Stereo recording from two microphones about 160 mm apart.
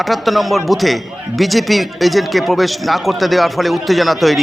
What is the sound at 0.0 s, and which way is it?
A man's voice, centre (ahead or behind).